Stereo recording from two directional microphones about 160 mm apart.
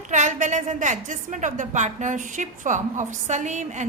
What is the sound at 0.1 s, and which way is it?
A woman's voice, 50° right (ahead or behind).